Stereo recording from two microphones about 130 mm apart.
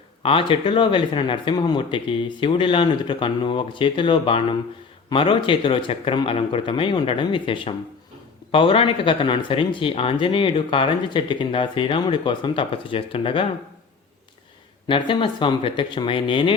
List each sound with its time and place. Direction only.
0.2 s speech: 45° left (ahead or behind)
14.8 s speech: 40° left (ahead or behind)